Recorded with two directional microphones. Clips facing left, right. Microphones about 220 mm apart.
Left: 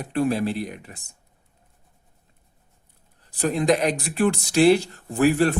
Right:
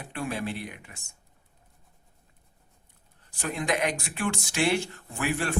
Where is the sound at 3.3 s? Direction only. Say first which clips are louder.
Left 9 dB; 35° left (ahead or behind).